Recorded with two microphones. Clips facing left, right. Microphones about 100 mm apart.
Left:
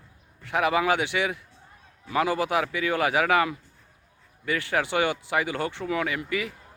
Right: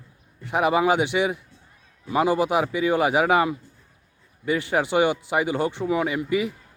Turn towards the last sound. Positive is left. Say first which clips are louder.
# right 5 dB
turn(degrees=-20)  # may be behind; listen again after turning